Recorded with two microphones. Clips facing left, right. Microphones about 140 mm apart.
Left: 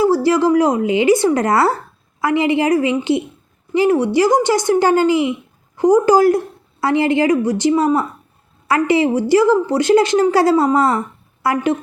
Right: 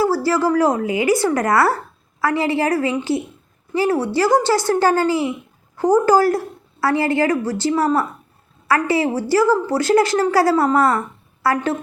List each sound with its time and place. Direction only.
0.0 s a woman's voice: 20° left (ahead or behind)